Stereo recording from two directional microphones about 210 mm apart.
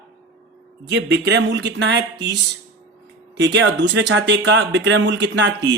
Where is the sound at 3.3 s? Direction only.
55° right (ahead or behind).